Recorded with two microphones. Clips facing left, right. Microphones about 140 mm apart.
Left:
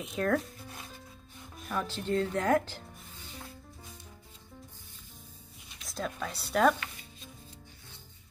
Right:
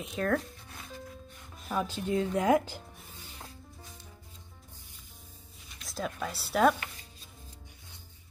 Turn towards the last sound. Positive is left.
turn(degrees=0)  # may be behind; listen again after turning